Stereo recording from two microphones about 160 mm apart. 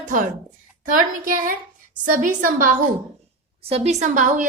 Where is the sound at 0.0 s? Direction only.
55° right (ahead or behind).